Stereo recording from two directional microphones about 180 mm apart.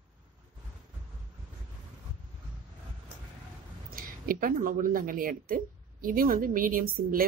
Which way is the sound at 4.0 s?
50° right (ahead or behind).